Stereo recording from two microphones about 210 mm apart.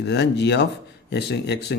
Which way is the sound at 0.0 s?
55° left (ahead or behind).